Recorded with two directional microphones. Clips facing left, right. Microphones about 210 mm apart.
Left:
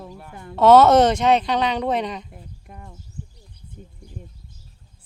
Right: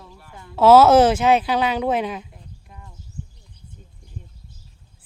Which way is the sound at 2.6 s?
55° left (ahead or behind).